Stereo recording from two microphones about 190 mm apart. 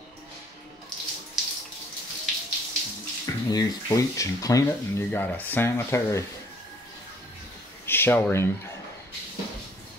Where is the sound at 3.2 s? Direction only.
20° left (ahead or behind).